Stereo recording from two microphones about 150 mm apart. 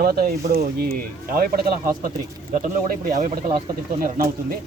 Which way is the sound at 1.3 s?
70° right (ahead or behind).